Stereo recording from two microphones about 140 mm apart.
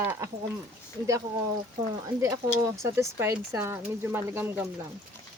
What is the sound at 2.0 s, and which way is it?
Speech, 25° right (ahead or behind).